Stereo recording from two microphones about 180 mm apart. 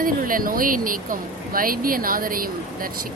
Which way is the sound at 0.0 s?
50° right (ahead or behind).